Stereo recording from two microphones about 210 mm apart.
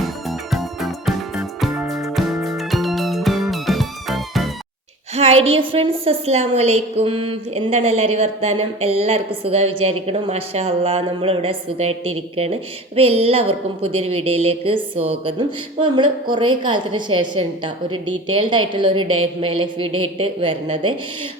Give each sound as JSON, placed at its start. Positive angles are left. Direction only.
{"t": 0.0, "sound": "music", "side_deg": 0}
{"t": 5.1, "sound": "a woman's voice", "side_deg": -30}